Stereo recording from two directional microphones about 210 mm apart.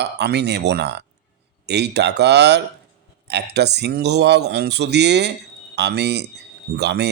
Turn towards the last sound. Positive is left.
turn(degrees=-55)  # may be behind; listen again after turning